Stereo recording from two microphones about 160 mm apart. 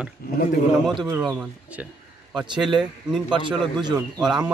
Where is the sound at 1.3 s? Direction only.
10° right (ahead or behind).